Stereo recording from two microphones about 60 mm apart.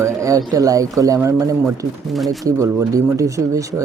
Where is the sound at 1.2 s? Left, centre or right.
Right.